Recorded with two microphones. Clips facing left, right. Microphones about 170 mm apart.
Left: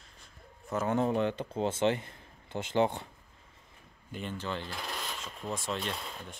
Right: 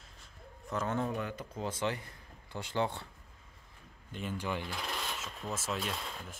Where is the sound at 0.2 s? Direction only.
5° left (ahead or behind).